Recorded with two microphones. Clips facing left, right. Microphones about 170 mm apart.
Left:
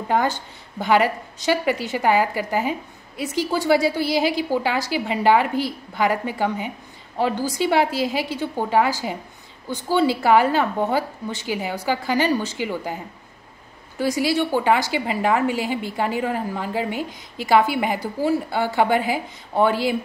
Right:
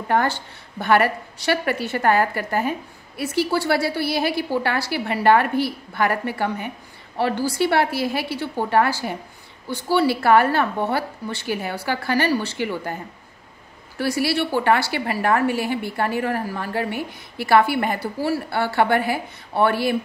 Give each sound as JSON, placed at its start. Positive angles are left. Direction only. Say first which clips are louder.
{"t": 0.1, "sound": "a woman's voice", "louder": "even", "side_deg": 15}